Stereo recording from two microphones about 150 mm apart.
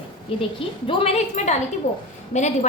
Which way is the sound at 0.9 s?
40° left (ahead or behind).